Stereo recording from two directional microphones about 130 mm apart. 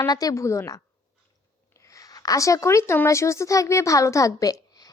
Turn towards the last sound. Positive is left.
turn(degrees=30)  # may be behind; listen again after turning